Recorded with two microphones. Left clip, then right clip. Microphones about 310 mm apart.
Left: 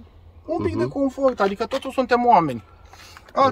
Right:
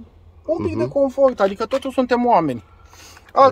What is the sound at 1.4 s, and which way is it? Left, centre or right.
Speech, centre.